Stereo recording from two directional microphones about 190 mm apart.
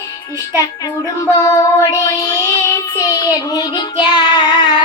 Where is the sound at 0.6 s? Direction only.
20° left (ahead or behind).